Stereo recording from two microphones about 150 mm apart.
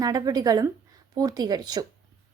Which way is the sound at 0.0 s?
25° right (ahead or behind).